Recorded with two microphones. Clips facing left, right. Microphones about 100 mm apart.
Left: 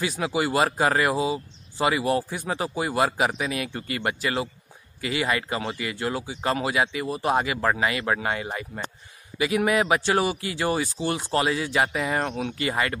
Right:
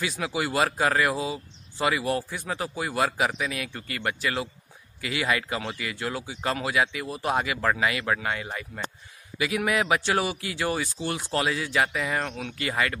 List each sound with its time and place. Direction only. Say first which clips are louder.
0.0 s speech: left 3 dB; 5° left (ahead or behind)
8.0 s speech: left 2 dB; 15° left (ahead or behind)
9.4 s speech: left 3 dB; 5° left (ahead or behind)
12.5 s speech: even; 5° left (ahead or behind)